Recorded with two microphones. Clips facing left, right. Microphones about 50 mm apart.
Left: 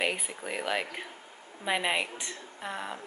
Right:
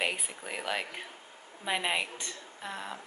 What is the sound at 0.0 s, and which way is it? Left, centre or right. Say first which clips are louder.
A woman's voice: left 2 dB; centre.